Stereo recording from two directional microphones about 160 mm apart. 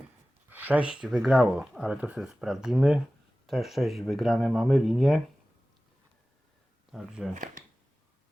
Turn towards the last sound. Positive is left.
turn(degrees=-55)  # may be behind; listen again after turning